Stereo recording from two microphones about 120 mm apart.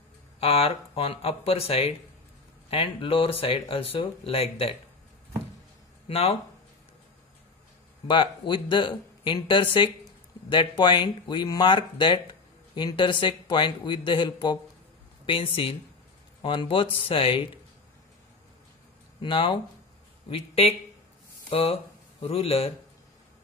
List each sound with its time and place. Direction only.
0.4 s speech: 55° left (ahead or behind)
6.0 s speech: 60° left (ahead or behind)
8.1 s speech: 40° left (ahead or behind)
19.2 s speech: 45° left (ahead or behind)